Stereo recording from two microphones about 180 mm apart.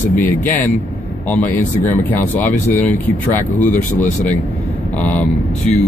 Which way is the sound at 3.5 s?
45° left (ahead or behind).